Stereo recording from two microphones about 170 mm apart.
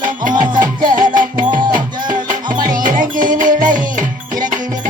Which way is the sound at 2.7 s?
50° right (ahead or behind).